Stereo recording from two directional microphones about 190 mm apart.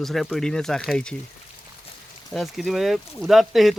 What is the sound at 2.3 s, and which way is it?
Speech, centre (ahead or behind).